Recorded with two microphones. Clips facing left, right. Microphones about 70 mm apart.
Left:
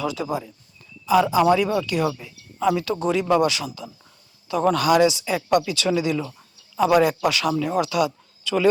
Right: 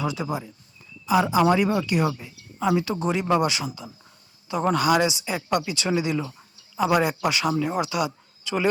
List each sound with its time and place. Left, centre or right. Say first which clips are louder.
0.0 s speech: left 2 dB; right